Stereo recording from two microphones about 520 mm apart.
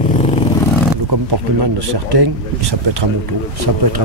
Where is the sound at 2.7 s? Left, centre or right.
Right.